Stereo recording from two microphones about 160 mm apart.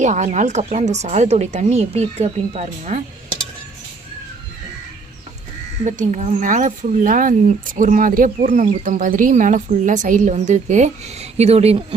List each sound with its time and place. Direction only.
0.0 s speech: 50° right (ahead or behind)
5.8 s speech: 50° right (ahead or behind)